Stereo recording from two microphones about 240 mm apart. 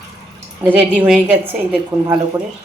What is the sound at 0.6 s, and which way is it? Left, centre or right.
A woman's voice, centre.